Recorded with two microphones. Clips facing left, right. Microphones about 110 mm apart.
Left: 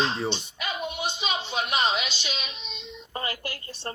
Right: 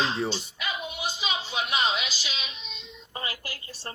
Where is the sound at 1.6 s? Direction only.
40° left (ahead or behind).